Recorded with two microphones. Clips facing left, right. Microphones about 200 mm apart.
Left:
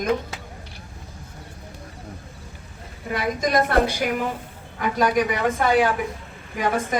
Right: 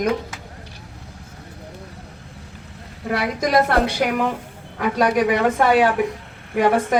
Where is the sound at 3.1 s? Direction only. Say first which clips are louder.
Right 3 dB; 85° right.